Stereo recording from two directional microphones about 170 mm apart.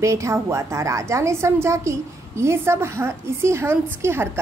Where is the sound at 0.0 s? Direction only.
20° right (ahead or behind).